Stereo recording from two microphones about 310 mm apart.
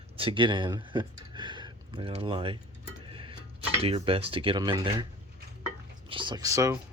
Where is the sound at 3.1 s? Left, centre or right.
Centre.